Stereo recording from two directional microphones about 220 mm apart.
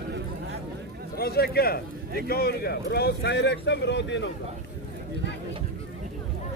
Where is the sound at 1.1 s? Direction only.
45° left (ahead or behind).